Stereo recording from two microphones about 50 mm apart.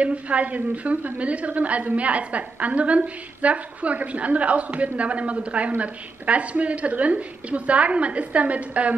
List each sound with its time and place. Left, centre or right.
0.0 s a woman's voice: right